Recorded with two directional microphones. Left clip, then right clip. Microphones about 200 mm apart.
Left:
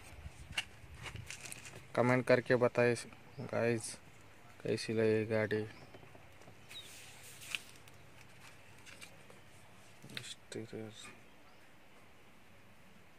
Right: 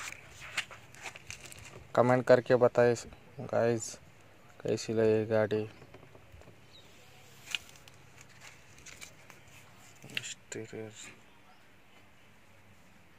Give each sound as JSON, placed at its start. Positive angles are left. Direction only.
{"t": 0.6, "sound": "a sound", "side_deg": -30}
{"t": 1.9, "sound": "speech", "side_deg": -5}
{"t": 10.5, "sound": "speech", "side_deg": -10}